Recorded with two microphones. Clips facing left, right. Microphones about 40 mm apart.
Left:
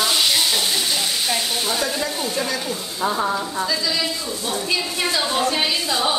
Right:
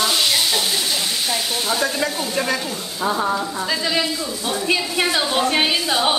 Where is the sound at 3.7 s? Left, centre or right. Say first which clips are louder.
Right 5 dB; right.